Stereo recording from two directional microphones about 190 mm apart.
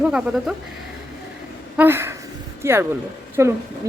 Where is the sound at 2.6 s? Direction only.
15° right (ahead or behind).